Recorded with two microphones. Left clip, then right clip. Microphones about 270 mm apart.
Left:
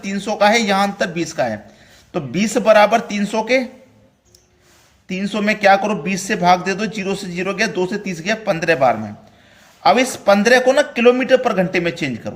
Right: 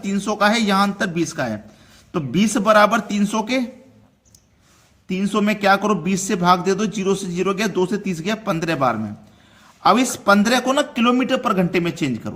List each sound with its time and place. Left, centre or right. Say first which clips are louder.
0.0 s a man's voice: left 3 dB; right
5.0 s a man's voice: left 1 dB; right